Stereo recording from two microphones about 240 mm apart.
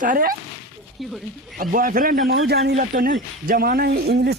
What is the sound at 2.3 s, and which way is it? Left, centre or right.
Speech, right.